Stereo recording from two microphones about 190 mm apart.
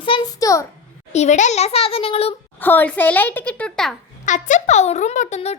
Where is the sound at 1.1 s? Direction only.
40° left (ahead or behind).